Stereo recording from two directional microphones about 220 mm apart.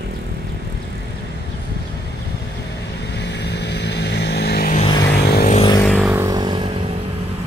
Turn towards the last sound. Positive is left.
turn(degrees=-25)  # may be behind; listen again after turning